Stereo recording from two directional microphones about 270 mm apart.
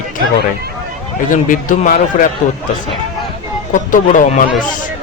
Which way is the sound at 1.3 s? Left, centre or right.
Left.